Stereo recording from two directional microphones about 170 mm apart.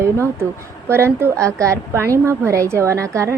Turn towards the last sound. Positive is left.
turn(degrees=-15)  # may be behind; listen again after turning